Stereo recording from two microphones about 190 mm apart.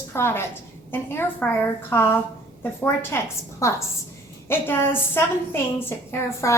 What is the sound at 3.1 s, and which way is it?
A woman's voice, 15° left (ahead or behind).